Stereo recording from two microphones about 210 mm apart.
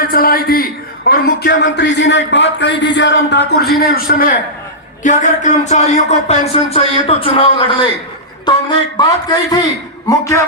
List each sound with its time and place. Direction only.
0.1 s a man's voice: 45° left (ahead or behind); by 10.4 s 15° left (ahead or behind)